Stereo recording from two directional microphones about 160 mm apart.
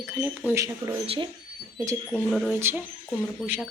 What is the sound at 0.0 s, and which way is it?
Speech, 10° right (ahead or behind).